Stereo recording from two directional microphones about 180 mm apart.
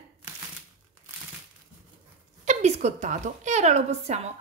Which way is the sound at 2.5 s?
40° right (ahead or behind).